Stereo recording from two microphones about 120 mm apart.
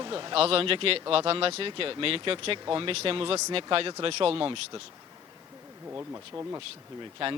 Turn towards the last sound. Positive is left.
turn(degrees=-50)  # may be behind; listen again after turning